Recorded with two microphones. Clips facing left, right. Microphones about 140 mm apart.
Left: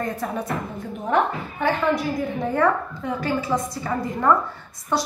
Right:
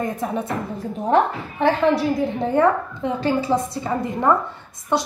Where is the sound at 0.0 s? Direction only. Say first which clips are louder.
Right 2 dB; 20° right (ahead or behind).